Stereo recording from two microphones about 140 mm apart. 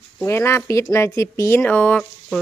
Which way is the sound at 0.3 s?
20° left (ahead or behind).